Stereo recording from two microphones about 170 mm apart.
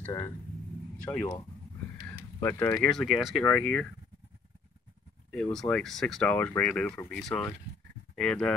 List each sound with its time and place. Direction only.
0.0 s speech: 20° left (ahead or behind)
2.9 s speech: centre (ahead or behind)
5.3 s speech: 5° left (ahead or behind)